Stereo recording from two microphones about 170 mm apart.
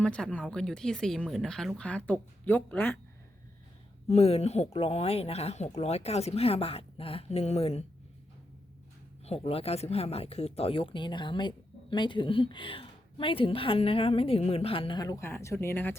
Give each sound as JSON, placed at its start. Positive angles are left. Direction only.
{"t": 0.0, "sound": "speech", "side_deg": 5}
{"t": 4.1, "sound": "speech", "side_deg": 35}
{"t": 9.2, "sound": "speech", "side_deg": 35}